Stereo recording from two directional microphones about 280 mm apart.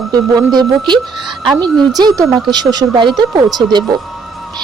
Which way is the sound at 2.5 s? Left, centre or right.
Centre.